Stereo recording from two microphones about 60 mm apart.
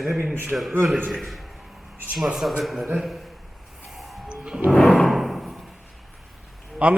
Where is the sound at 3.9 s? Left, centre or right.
Centre.